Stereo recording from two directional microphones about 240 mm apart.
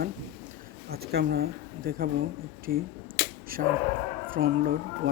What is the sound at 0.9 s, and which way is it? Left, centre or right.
Speech, right.